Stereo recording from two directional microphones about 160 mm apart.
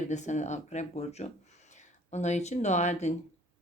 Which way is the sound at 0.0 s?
50° left (ahead or behind).